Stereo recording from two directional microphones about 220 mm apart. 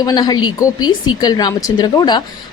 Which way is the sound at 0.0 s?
20° left (ahead or behind).